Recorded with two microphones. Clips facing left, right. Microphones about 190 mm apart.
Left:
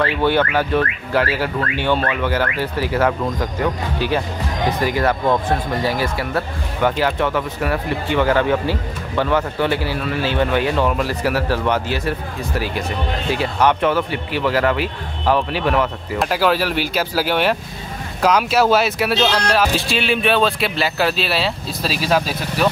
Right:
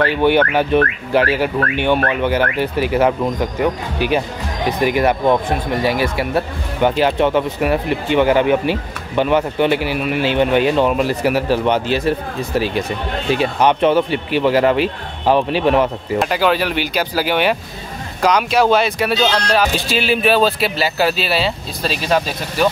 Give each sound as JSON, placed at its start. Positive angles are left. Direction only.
{"t": 0.2, "sound": "speech", "side_deg": -15}
{"t": 13.4, "sound": "speech", "side_deg": -20}
{"t": 16.2, "sound": "speech", "side_deg": 0}